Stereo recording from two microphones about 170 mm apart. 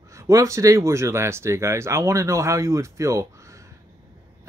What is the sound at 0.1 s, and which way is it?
Speech, 20° right (ahead or behind).